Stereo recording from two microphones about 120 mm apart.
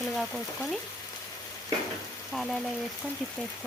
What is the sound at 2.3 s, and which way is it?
Frying, centre (ahead or behind).